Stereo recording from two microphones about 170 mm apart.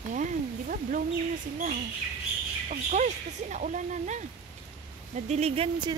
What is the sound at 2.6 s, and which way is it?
Speech, 45° right (ahead or behind).